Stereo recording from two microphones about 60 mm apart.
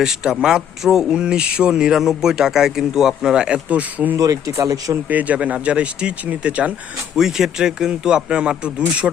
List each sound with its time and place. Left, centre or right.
0.0 s a man's voice: centre; by 4.1 s right
4.2 s speech: right
5.0 s speech: right
7.2 s a man's voice: centre